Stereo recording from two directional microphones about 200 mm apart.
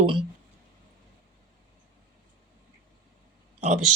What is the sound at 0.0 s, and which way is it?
Speech, 25° right (ahead or behind).